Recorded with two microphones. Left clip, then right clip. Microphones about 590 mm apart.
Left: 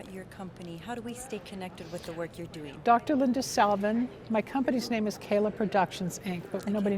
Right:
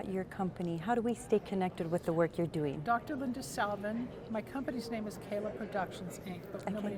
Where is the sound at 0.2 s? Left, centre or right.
Right.